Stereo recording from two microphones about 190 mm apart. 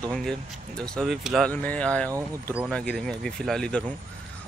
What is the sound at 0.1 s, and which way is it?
Speech, centre (ahead or behind).